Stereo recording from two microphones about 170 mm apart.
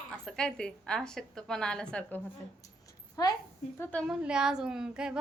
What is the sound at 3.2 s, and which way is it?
Speech, 20° left (ahead or behind).